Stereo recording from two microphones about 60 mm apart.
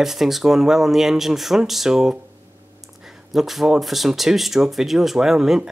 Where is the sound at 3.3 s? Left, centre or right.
Centre.